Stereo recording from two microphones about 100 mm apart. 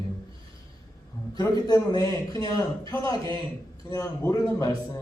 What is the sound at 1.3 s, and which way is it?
A man's voice, 40° left (ahead or behind).